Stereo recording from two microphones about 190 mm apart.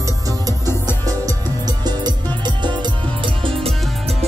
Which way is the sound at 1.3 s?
20° right (ahead or behind).